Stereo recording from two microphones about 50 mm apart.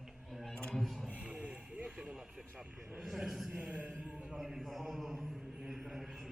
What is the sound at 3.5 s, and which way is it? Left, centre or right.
Mantra, right.